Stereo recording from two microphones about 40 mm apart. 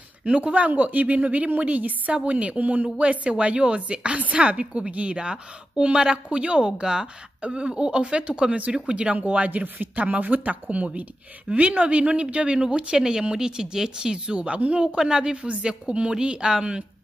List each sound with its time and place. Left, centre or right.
0.2 s speech: right
12.5 s a woman's voice: centre